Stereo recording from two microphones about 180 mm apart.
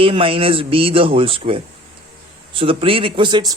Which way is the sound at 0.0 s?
30° right (ahead or behind).